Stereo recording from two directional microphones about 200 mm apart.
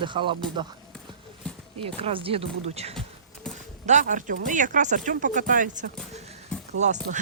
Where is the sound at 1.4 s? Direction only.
5° left (ahead or behind).